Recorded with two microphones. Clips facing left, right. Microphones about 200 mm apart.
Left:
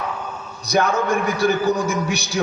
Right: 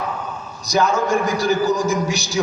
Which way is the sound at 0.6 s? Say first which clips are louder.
Right 1 dB; 60° left (ahead or behind).